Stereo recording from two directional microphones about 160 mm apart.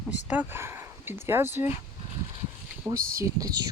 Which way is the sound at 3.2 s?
20° right (ahead or behind).